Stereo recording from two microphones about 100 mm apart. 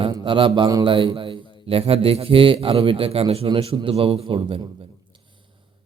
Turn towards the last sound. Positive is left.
turn(degrees=-70)  # may be behind; listen again after turning